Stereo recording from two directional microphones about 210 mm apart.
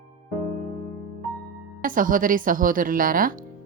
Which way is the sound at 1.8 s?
40° right (ahead or behind).